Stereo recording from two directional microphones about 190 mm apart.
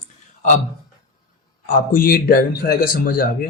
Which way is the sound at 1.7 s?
45° left (ahead or behind).